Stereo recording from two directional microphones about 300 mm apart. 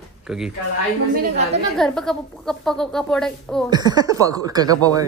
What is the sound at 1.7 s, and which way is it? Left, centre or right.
Speech, centre.